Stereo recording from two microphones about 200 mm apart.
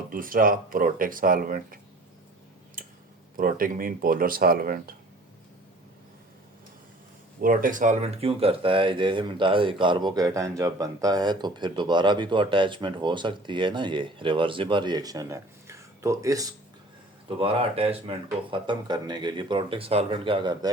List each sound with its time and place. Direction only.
0.1 s speech: 45° right (ahead or behind)
3.3 s speech: 45° right (ahead or behind)
7.4 s speech: 45° right (ahead or behind); by 16.5 s 15° right (ahead or behind)
17.2 s speech: 30° right (ahead or behind)